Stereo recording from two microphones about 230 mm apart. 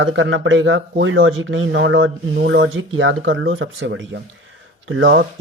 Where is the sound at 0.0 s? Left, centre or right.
Right.